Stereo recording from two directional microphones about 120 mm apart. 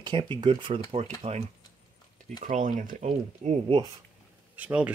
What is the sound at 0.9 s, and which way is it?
Speech, 60° right (ahead or behind).